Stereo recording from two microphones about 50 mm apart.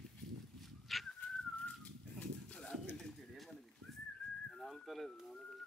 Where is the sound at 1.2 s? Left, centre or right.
Left.